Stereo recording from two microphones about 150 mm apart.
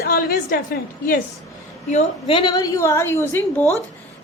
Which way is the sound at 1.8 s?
50° left (ahead or behind).